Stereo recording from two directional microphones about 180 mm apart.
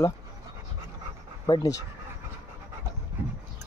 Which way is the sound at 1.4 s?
25° left (ahead or behind).